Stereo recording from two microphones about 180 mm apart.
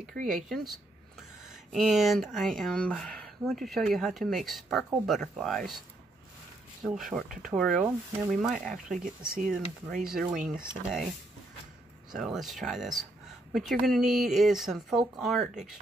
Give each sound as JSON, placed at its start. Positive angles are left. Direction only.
{"t": 0.0, "sound": "speech", "side_deg": -50}
{"t": 1.5, "sound": "speech", "side_deg": 0}
{"t": 6.8, "sound": "speech", "side_deg": 0}
{"t": 12.1, "sound": "speech", "side_deg": 0}